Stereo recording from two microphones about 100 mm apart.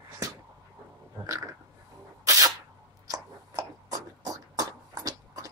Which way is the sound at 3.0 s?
35° right (ahead or behind).